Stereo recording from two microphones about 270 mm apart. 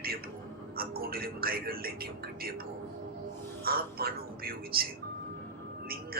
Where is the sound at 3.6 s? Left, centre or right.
Right.